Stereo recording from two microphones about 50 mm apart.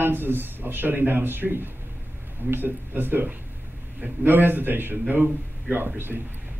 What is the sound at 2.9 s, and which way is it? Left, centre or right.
A man's voice, right.